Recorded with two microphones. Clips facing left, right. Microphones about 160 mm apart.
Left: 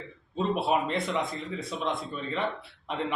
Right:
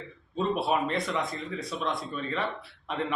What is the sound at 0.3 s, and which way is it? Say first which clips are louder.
Speech: even; 20° left (ahead or behind).